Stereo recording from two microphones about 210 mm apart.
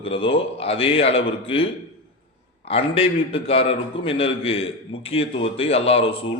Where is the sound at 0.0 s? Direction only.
25° left (ahead or behind).